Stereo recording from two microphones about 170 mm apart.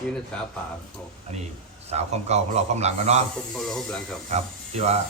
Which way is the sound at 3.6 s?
Centre (ahead or behind).